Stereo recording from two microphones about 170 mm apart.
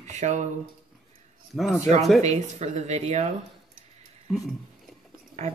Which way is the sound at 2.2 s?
40° right (ahead or behind).